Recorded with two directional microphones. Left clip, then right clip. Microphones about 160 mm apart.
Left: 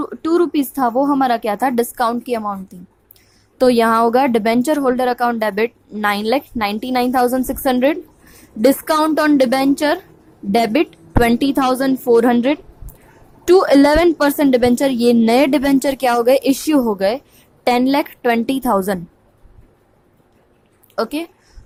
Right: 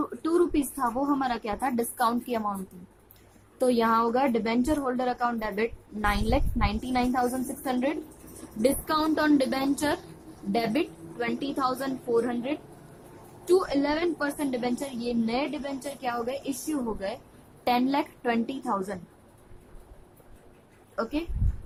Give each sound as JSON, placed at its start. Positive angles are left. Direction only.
{"t": 0.0, "sound": "a woman's voice", "side_deg": 55}
{"t": 3.6, "sound": "a woman's voice", "side_deg": 55}
{"t": 20.9, "sound": "a woman's voice", "side_deg": 65}